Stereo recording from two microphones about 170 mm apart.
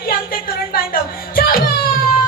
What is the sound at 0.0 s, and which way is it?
Music, 60° left (ahead or behind).